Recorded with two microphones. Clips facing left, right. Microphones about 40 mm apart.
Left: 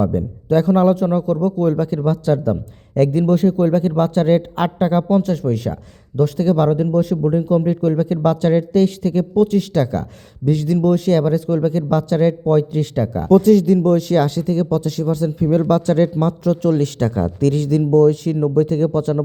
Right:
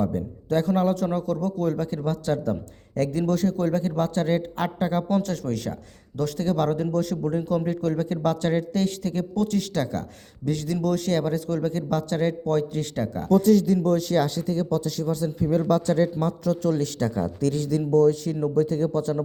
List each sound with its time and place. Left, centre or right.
0.5 s a man's voice: left
5.0 s speech: left
8.0 s a man's voice: left